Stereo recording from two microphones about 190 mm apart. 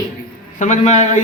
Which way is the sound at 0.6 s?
40° left (ahead or behind).